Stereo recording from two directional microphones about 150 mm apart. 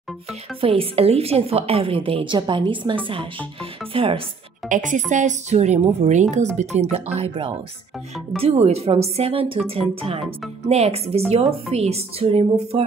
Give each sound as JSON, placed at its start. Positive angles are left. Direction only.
{"t": 0.6, "sound": "a woman's voice", "side_deg": -40}
{"t": 4.6, "sound": "speech", "side_deg": -55}
{"t": 8.4, "sound": "a woman's voice", "side_deg": -45}